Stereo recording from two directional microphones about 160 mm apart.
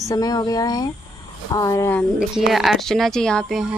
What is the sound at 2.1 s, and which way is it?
Speech, 5° right (ahead or behind).